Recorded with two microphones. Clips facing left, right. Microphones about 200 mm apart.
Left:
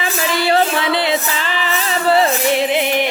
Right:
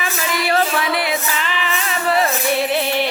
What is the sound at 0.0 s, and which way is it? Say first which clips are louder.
Music: left 4 dB; 30° left (ahead or behind).